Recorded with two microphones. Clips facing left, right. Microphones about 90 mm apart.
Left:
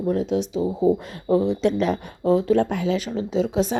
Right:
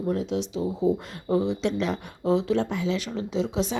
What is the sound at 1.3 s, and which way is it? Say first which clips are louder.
A woman's voice: left 5 dB; 50° left (ahead or behind).